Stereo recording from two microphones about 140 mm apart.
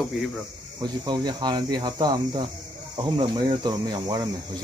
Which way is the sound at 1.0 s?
30° right (ahead or behind).